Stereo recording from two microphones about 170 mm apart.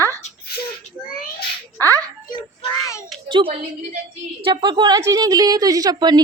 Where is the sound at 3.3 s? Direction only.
30° right (ahead or behind).